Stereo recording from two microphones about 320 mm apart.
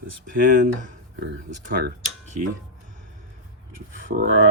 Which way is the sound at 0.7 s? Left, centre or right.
Right.